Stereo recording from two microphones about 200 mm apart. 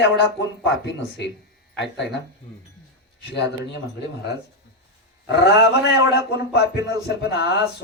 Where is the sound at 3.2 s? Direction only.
60° left (ahead or behind).